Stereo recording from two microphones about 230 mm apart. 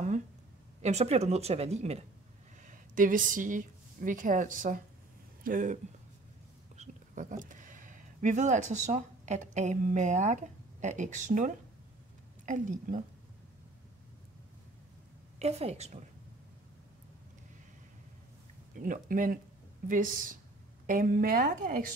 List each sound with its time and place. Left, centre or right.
0.8 s a woman's voice: right
6.8 s a woman's voice: right
15.3 s a woman's voice: right
18.8 s a woman's voice: right